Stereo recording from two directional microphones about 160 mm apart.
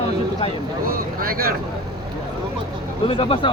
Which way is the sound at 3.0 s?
35° left (ahead or behind).